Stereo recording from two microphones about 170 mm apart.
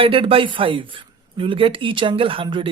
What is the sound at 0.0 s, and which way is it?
A man's voice, 30° right (ahead or behind).